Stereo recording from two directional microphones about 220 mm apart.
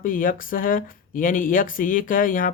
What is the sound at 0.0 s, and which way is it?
Speech, 40° left (ahead or behind).